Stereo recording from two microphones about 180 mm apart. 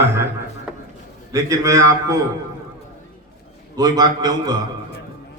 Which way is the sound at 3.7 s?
20° right (ahead or behind).